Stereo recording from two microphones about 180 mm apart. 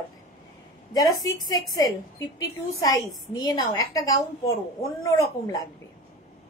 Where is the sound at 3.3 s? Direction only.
20° left (ahead or behind).